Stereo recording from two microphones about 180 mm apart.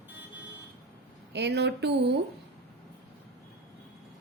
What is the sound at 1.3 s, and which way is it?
Speech, 70° right (ahead or behind).